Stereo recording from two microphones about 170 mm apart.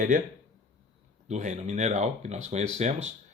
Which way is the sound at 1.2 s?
45° right (ahead or behind).